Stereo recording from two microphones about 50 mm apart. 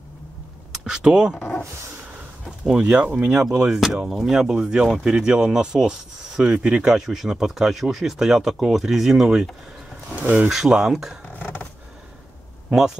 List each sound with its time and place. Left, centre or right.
0.8 s speech: centre
1.3 s a sound: left
2.8 s speech: right
7.0 s speech: centre
10.5 s speech: centre
11.3 s a sound: left
12.6 s speech: centre